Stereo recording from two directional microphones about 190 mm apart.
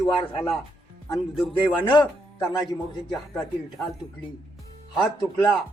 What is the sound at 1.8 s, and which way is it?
Speech, 25° left (ahead or behind).